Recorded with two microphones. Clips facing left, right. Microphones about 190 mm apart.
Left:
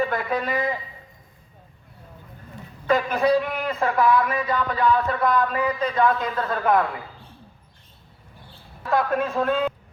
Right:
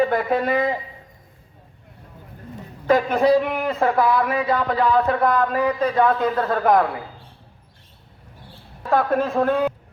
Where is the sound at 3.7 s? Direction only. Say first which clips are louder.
Right 1 dB; 30° right (ahead or behind).